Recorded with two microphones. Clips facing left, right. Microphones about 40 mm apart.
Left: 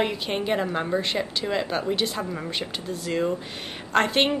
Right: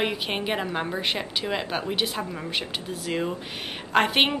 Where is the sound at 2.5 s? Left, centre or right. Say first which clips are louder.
Even; centre.